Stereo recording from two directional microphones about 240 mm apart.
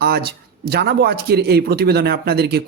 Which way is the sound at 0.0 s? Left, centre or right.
Right.